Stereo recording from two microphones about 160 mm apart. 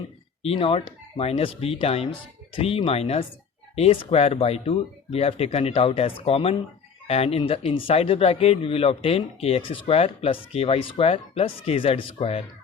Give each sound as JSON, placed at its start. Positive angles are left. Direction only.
{"t": 0.4, "sound": "speech", "side_deg": 35}